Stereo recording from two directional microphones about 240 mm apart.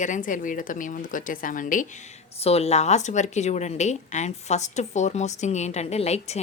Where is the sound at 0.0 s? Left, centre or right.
Left.